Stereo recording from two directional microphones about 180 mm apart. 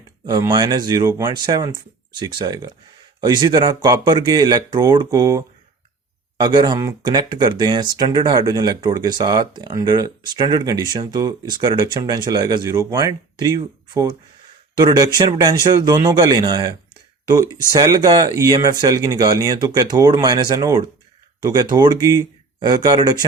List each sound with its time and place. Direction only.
0.3 s speech: 25° right (ahead or behind)
14.8 s speech: 20° right (ahead or behind)